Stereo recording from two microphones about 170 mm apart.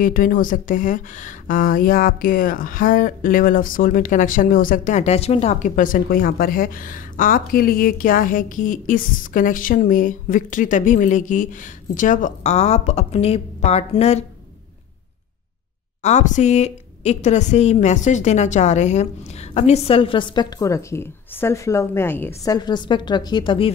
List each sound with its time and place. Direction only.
0.0 s speech: 55° left (ahead or behind)
16.0 s a woman's voice: 40° left (ahead or behind)